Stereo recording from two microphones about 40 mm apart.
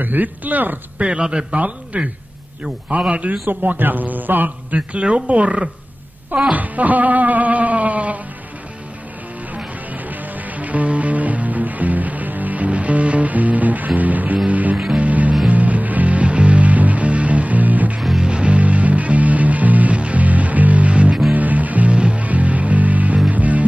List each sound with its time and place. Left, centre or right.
0.0 s a man's voice: right
0.9 s speech: right
1.5 s music: right
3.1 s music: right
3.4 s a man's voice: right
4.7 s music: right
10.0 s music: right
14.5 s a man's voice: right
15.0 s music: right
18.2 s music: right
21.3 s music: right
21.9 s music: right